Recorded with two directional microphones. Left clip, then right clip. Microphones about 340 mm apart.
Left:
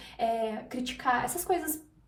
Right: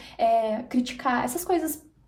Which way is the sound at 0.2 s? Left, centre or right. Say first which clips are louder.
Right 8 dB; right.